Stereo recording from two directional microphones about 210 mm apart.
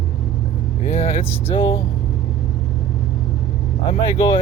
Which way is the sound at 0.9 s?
30° left (ahead or behind).